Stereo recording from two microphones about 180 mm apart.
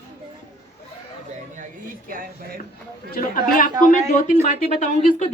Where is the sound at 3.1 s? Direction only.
50° left (ahead or behind).